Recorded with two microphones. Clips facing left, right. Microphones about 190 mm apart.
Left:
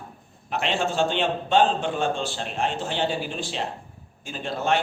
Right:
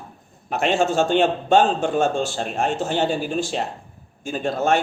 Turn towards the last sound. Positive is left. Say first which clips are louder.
# right 5 dB
turn(degrees=-45)  # may be behind; listen again after turning